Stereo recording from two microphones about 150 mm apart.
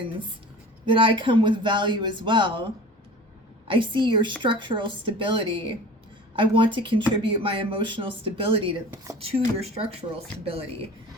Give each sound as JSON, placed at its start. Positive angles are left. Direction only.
{"t": 0.9, "sound": "speech", "side_deg": -35}
{"t": 3.7, "sound": "speech", "side_deg": -35}